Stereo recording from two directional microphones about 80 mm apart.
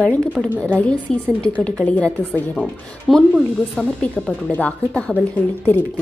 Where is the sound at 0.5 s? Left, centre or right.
Centre.